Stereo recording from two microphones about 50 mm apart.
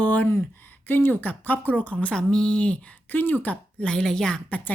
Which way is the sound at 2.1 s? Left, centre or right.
Centre.